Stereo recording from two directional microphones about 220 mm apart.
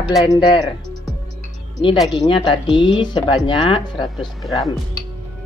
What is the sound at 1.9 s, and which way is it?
Speech, centre (ahead or behind).